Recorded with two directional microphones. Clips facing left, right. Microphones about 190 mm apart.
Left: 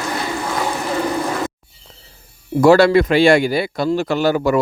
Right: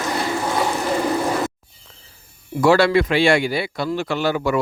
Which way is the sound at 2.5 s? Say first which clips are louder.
Left 4 dB; 40° left (ahead or behind).